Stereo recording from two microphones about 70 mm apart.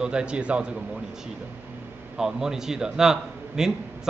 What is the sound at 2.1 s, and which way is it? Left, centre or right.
A man's voice, centre.